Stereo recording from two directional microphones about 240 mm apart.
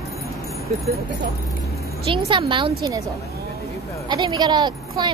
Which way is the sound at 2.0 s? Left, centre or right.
Right.